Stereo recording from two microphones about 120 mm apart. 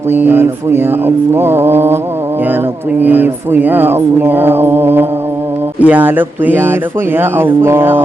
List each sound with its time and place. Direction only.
0.1 s mantra: 15° right (ahead or behind)
3.0 s mantra: 15° right (ahead or behind)